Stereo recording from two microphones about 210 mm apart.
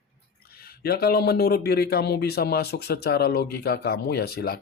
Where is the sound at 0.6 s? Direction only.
50° left (ahead or behind).